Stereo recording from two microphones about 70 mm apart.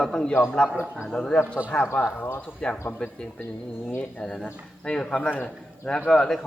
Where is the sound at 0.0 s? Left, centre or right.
Centre.